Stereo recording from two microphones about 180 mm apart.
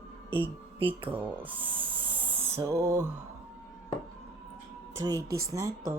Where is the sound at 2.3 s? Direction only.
20° right (ahead or behind).